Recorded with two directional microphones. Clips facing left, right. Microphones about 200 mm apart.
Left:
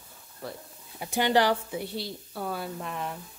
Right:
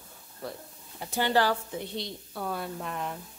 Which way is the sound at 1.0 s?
15° left (ahead or behind).